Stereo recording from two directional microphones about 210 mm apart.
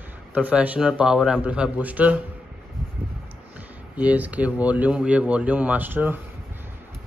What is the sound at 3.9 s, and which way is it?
Speech, 5° right (ahead or behind).